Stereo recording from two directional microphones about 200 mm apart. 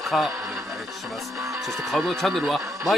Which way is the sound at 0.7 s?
Centre (ahead or behind).